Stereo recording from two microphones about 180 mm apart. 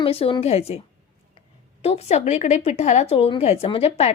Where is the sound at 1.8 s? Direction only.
35° left (ahead or behind).